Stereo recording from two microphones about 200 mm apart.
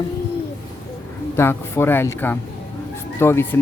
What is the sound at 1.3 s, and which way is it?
Speech, 10° left (ahead or behind).